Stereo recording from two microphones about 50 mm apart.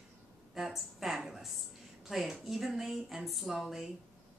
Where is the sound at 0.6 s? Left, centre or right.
Centre.